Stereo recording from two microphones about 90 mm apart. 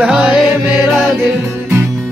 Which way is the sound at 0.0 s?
10° right (ahead or behind).